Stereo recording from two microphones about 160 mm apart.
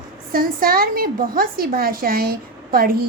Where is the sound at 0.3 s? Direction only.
65° right (ahead or behind).